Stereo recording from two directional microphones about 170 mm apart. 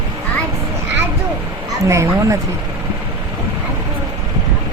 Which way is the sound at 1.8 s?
15° right (ahead or behind).